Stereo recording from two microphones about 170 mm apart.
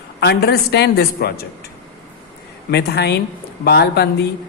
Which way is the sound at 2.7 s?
75° left (ahead or behind).